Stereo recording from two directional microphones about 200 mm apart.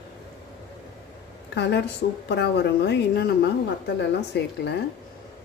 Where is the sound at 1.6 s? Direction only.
55° left (ahead or behind).